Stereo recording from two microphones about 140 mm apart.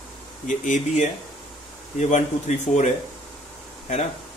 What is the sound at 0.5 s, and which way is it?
Speech, 60° left (ahead or behind).